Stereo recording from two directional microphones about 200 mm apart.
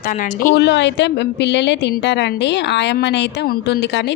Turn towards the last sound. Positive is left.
turn(degrees=60)  # may be behind; listen again after turning